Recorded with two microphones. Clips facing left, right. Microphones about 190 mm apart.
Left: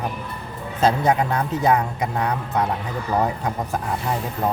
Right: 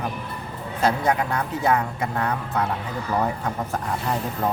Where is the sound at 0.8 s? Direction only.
20° left (ahead or behind).